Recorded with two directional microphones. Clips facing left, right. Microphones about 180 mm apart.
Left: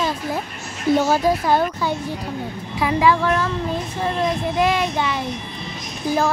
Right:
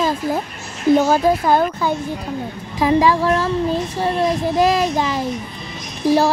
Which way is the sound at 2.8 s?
35° right (ahead or behind).